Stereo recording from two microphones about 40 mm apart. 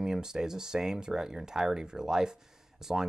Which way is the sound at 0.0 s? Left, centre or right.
Centre.